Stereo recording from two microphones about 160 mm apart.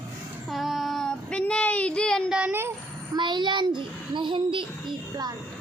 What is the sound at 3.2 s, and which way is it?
A child's voice, 30° right (ahead or behind).